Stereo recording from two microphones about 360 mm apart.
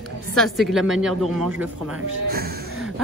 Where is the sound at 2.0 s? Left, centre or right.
Right.